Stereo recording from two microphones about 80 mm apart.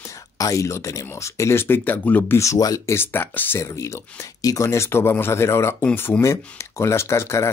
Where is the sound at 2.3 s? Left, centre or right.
Left.